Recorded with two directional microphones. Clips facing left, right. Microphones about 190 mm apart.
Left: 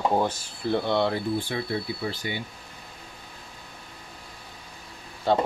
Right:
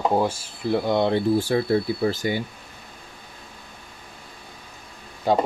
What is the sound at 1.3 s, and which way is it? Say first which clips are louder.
Speech: right 8 dB; 40° right (ahead or behind).